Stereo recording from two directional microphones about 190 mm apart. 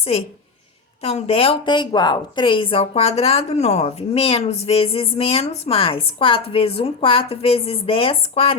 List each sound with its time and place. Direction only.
1.0 s a woman's voice: 30° left (ahead or behind)